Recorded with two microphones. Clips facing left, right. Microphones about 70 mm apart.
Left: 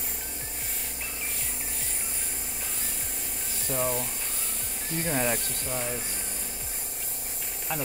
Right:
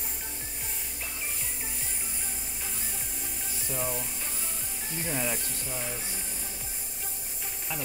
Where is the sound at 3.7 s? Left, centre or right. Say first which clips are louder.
Left 5 dB; left.